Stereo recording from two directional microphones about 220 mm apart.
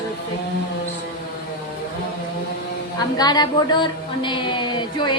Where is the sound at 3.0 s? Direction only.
20° left (ahead or behind).